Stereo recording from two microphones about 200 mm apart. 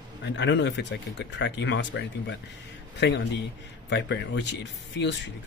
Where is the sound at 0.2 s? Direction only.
60° left (ahead or behind).